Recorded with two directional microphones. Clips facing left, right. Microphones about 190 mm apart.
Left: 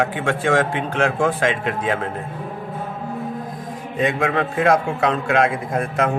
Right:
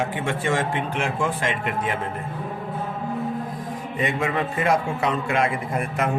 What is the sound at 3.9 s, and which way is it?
A man's voice, 90° left.